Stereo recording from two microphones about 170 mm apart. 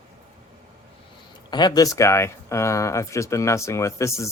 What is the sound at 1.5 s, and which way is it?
Speech, 25° left (ahead or behind).